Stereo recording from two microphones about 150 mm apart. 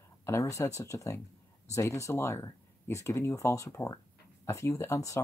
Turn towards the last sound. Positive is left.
turn(degrees=20)  # may be behind; listen again after turning